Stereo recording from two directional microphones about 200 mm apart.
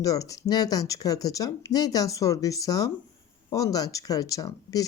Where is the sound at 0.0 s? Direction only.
15° left (ahead or behind).